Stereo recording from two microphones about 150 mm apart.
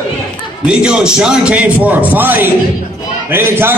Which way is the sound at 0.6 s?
5° right (ahead or behind).